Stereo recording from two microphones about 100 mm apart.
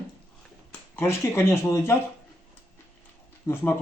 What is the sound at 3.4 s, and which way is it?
Speech, 25° left (ahead or behind).